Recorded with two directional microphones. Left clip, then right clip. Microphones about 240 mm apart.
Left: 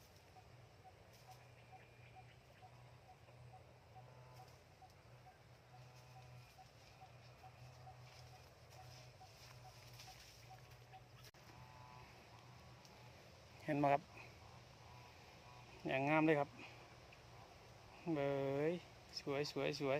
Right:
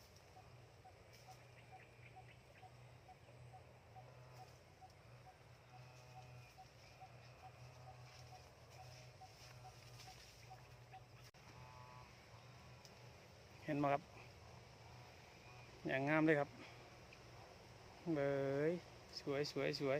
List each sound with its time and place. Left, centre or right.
13.7 s speech: centre
15.9 s speech: centre
18.1 s speech: centre